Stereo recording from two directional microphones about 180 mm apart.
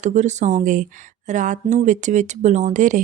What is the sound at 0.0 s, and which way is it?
A woman's voice, 40° right (ahead or behind).